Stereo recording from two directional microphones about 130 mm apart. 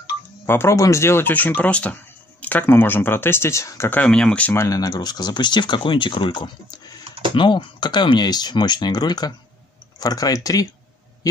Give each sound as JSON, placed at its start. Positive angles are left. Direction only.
{"t": 0.5, "sound": "speech", "side_deg": 20}
{"t": 4.0, "sound": "speech", "side_deg": 5}
{"t": 7.1, "sound": "typing", "side_deg": -40}
{"t": 7.3, "sound": "speech", "side_deg": 35}